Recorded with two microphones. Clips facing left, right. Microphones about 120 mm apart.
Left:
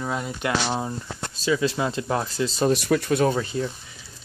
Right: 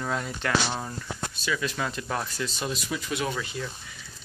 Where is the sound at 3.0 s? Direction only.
40° left (ahead or behind).